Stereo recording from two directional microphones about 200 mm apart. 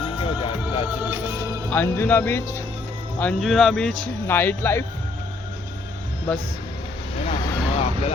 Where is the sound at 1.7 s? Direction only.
10° left (ahead or behind).